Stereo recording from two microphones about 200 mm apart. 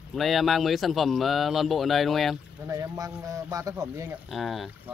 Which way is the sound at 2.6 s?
15° right (ahead or behind).